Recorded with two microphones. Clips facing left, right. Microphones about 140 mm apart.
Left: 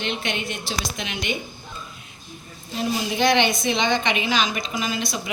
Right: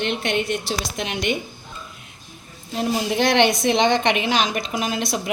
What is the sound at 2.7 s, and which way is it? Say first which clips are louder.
A woman's voice: right 3 dB; 70° right (ahead or behind).